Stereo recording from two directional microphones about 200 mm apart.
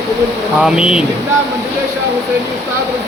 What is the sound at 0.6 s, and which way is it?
Speech, 5° right (ahead or behind).